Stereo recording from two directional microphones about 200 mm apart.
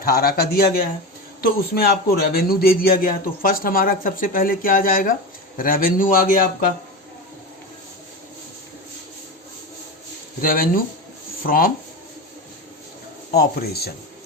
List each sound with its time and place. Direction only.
0.0 s a man's voice: 50° left (ahead or behind)
10.4 s a man's voice: 45° left (ahead or behind)
13.3 s a man's voice: 50° left (ahead or behind)